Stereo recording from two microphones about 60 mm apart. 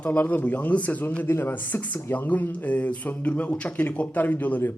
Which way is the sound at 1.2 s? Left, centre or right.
Left.